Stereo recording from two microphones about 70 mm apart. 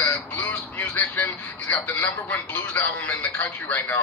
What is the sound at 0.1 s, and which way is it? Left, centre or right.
Honk, centre.